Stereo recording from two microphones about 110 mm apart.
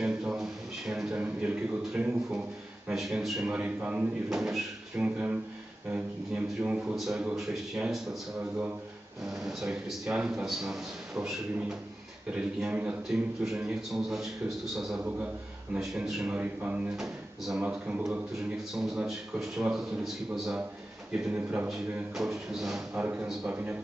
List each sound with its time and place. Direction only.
0.0 s a man's voice: 10° right (ahead or behind)
5.0 s a man's voice: 15° right (ahead or behind)
22.1 s a man's voice: 5° right (ahead or behind)
22.9 s speech: 15° right (ahead or behind)